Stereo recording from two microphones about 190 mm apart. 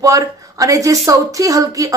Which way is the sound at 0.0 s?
15° right (ahead or behind).